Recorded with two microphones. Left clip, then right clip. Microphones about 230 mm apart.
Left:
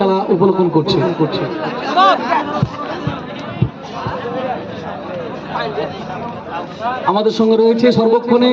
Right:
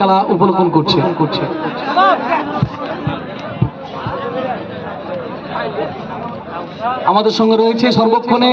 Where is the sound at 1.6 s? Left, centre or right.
Left.